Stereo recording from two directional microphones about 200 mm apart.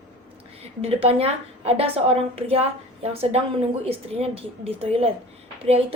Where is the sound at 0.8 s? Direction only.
30° right (ahead or behind).